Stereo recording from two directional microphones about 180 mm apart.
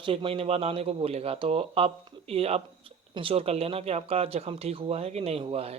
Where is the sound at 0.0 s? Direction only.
30° right (ahead or behind).